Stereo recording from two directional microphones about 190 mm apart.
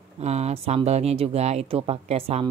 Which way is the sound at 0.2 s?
35° right (ahead or behind).